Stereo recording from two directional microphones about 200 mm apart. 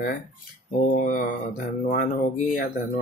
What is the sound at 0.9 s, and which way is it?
Speech, 40° left (ahead or behind).